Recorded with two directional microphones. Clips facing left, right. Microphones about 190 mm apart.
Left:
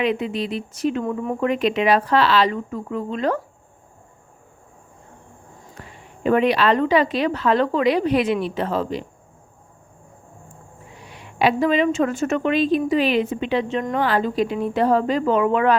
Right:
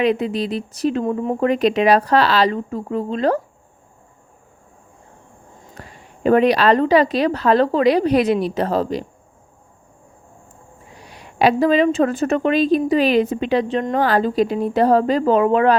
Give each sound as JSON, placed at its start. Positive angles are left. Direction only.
{"t": 0.0, "sound": "speech", "side_deg": -35}
{"t": 5.8, "sound": "a sound", "side_deg": -35}
{"t": 6.2, "sound": "speech", "side_deg": -40}
{"t": 10.9, "sound": "speech", "side_deg": -40}